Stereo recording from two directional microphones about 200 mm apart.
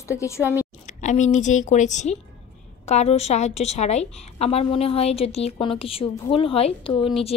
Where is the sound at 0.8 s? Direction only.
35° left (ahead or behind).